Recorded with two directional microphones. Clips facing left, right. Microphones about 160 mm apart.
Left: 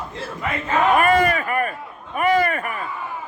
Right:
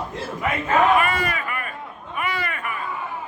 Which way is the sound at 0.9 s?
45° left (ahead or behind).